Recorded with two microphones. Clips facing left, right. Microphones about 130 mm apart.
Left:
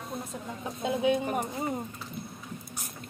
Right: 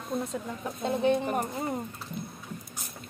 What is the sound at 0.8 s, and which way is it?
Speech, 10° left (ahead or behind).